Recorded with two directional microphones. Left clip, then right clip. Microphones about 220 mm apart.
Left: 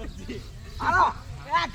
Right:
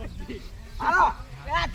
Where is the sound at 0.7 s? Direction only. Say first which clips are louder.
Right 1 dB; 5° right (ahead or behind).